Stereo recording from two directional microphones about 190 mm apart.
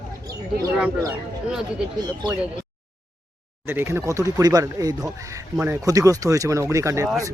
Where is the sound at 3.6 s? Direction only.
10° right (ahead or behind).